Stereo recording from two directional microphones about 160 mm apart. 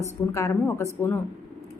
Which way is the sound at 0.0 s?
20° left (ahead or behind).